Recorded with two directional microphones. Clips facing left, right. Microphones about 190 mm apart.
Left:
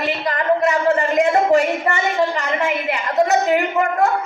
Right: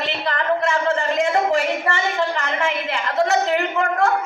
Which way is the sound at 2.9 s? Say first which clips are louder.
Left 3 dB; 20° left (ahead or behind).